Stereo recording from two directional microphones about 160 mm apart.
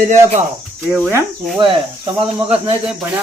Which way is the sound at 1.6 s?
35° right (ahead or behind).